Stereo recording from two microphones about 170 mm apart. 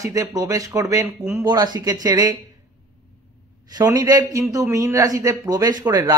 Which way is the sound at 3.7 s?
20° right (ahead or behind).